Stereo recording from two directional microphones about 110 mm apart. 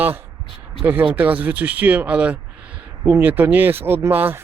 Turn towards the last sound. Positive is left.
turn(degrees=-20)  # may be behind; listen again after turning